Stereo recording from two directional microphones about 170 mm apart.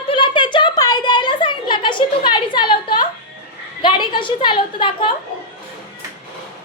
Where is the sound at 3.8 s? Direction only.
30° left (ahead or behind).